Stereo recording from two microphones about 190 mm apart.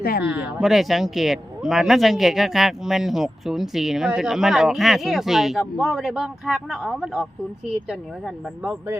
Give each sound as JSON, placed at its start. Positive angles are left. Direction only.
{"t": 0.0, "sound": "speech", "side_deg": 55}
{"t": 0.3, "sound": "speech", "side_deg": -5}